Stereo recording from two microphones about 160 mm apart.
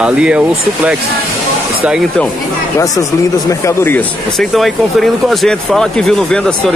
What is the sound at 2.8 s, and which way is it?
Speech, 20° left (ahead or behind).